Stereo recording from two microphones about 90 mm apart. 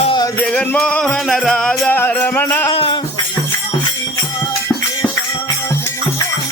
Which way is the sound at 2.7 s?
90° left.